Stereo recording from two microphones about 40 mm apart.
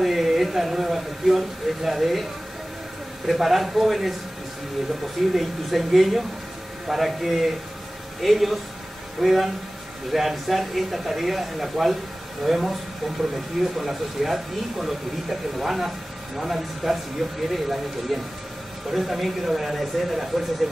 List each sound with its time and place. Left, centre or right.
0.0 s speech: centre
3.3 s speech: centre
5.3 s speech: centre
13.7 s speech: centre